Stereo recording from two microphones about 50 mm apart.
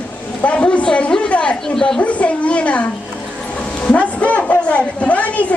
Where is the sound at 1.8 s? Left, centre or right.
Centre.